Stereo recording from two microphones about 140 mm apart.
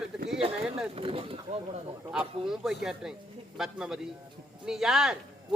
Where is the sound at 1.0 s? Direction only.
40° right (ahead or behind).